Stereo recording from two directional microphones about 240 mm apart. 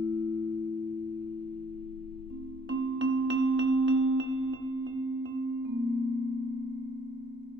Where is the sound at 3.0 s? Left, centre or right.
Right.